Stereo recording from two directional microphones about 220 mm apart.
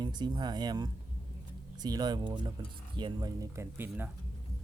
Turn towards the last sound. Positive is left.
turn(degrees=-10)  # may be behind; listen again after turning